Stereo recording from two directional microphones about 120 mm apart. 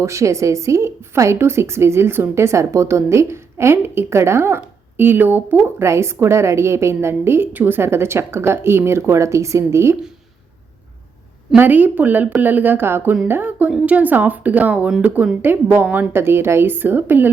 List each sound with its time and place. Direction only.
0.0 s a woman's voice: 25° right (ahead or behind)
11.5 s speech: 15° right (ahead or behind)